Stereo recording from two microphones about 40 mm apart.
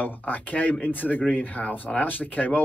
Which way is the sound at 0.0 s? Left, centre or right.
Left.